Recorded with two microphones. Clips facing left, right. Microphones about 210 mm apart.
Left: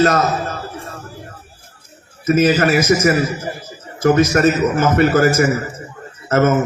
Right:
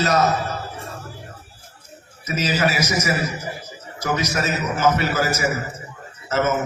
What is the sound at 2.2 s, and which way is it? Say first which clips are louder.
A man's voice: left 8 dB; 50° left (ahead or behind).